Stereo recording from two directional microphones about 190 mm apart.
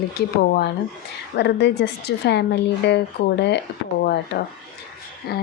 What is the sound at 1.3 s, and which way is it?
Speech, 65° left (ahead or behind).